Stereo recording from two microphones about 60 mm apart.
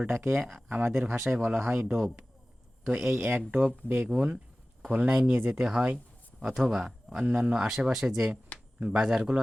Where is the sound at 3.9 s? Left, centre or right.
Centre.